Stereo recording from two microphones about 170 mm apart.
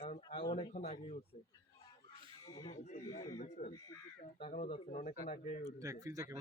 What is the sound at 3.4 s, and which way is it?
Speech, 40° left (ahead or behind).